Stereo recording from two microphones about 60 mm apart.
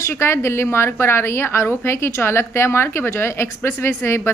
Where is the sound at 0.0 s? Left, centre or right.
Left.